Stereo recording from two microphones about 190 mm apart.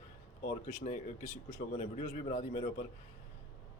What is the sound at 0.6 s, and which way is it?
Speech, 45° left (ahead or behind).